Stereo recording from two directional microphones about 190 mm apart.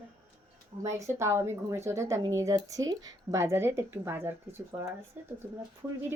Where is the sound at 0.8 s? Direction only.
15° right (ahead or behind).